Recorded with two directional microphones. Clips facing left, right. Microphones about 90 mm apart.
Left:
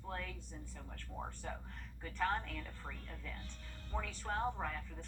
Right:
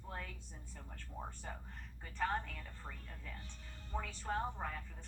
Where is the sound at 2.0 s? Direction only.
15° right (ahead or behind).